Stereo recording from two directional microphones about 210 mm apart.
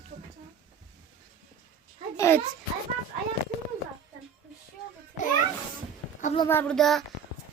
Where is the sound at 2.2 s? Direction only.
10° left (ahead or behind).